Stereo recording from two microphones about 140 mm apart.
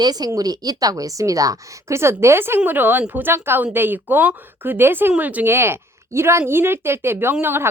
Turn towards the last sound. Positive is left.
turn(degrees=-15)  # may be behind; listen again after turning